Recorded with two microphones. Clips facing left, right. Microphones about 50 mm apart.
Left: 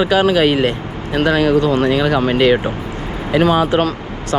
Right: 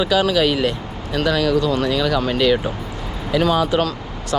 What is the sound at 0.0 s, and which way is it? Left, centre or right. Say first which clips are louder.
Speech: left 4 dB; left.